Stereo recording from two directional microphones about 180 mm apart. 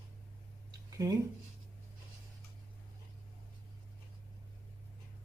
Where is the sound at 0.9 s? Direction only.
20° right (ahead or behind).